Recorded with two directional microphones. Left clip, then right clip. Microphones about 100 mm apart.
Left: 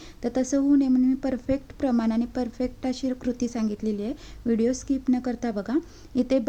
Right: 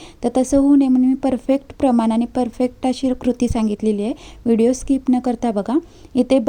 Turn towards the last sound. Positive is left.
turn(degrees=-50)  # may be behind; listen again after turning